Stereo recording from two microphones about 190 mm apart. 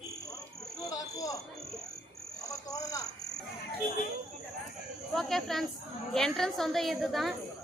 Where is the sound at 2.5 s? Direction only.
20° left (ahead or behind).